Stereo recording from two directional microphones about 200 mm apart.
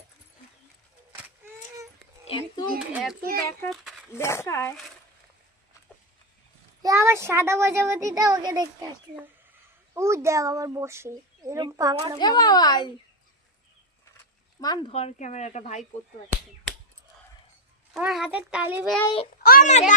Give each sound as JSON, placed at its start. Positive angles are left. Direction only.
{"t": 2.2, "sound": "a sound", "side_deg": 25}
{"t": 2.7, "sound": "a child's voice", "side_deg": -5}
{"t": 3.7, "sound": "a sound", "side_deg": 0}
{"t": 4.2, "sound": "speech", "side_deg": 15}
{"t": 6.8, "sound": "a child's voice", "side_deg": -15}
{"t": 9.9, "sound": "a child's voice", "side_deg": -15}
{"t": 12.2, "sound": "a child's voice", "side_deg": 20}
{"t": 14.6, "sound": "a child's voice", "side_deg": 20}
{"t": 14.9, "sound": "speech", "side_deg": 35}
{"t": 17.9, "sound": "a child's voice", "side_deg": 0}
{"t": 19.0, "sound": "a child's voice", "side_deg": 25}
{"t": 19.4, "sound": "a child's voice", "side_deg": 45}